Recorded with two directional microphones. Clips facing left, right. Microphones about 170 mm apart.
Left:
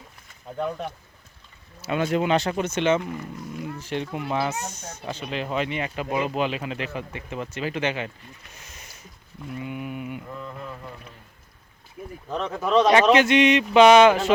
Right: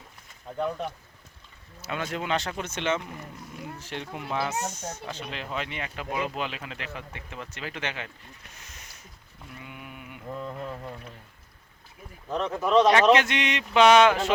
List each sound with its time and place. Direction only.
1.8 s speech: 10° left (ahead or behind)
9.6 s speech: 10° left (ahead or behind)
10.2 s a sound: 30° right (ahead or behind)
12.3 s speech: centre (ahead or behind)